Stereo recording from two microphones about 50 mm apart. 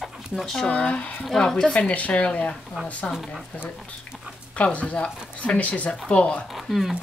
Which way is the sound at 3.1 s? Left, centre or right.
Centre.